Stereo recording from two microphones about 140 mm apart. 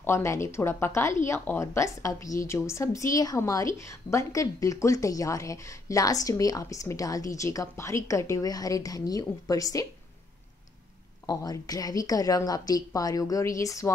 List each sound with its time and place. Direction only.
0.0 s a woman's voice: 20° left (ahead or behind)
11.2 s a woman's voice: 25° left (ahead or behind)